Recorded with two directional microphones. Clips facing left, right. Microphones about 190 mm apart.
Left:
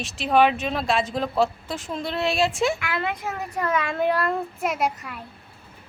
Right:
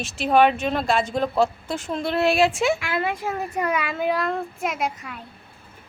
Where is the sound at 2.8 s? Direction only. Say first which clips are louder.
Right 2 dB; 25° right (ahead or behind).